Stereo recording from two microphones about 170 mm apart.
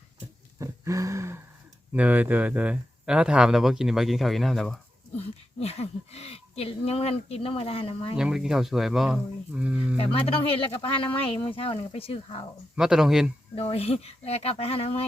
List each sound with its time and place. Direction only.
0.6 s a sound: 20° right (ahead or behind)
1.9 s speech: 10° right (ahead or behind)
5.5 s speech: 35° left (ahead or behind)
8.1 s speech: 5° right (ahead or behind)
10.0 s speech: 35° left (ahead or behind)
11.4 s speech: 35° left (ahead or behind)
12.7 s speech: 5° right (ahead or behind)
13.6 s speech: 35° left (ahead or behind)